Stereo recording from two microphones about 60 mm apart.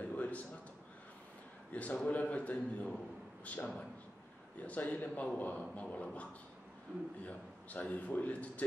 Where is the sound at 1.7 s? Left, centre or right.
Left.